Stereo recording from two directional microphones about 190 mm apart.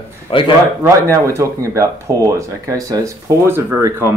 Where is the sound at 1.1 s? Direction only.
15° right (ahead or behind).